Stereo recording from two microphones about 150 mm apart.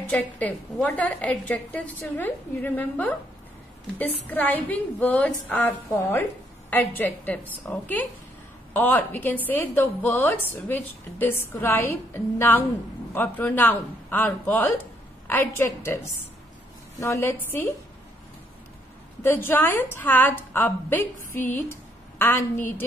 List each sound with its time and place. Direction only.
0.1 s a woman's voice: 10° left (ahead or behind)
17.0 s a woman's voice: 15° left (ahead or behind)
19.2 s a woman's voice: 15° left (ahead or behind)